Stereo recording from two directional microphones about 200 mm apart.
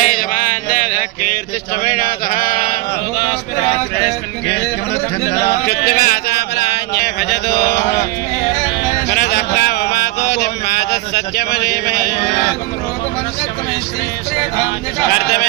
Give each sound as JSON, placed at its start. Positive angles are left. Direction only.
{"t": 0.0, "sound": "mantra", "side_deg": 40}
{"t": 5.3, "sound": "speech", "side_deg": 50}
{"t": 6.9, "sound": "mantra", "side_deg": 50}
{"t": 9.0, "sound": "a sound", "side_deg": 55}
{"t": 15.1, "sound": "speech", "side_deg": 50}